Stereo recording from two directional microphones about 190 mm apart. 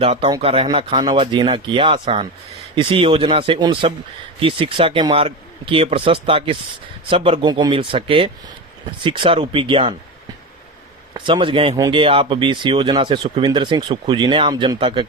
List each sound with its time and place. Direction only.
0.0 s speech: 30° right (ahead or behind)
11.1 s speech: 25° right (ahead or behind)